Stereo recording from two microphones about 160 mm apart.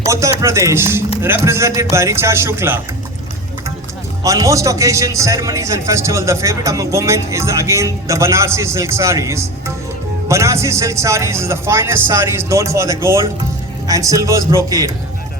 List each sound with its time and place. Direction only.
0.1 s a man's voice: 20° right (ahead or behind)
4.2 s a man's voice: 20° right (ahead or behind)